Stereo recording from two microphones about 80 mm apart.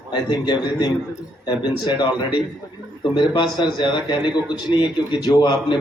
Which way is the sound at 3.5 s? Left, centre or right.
Left.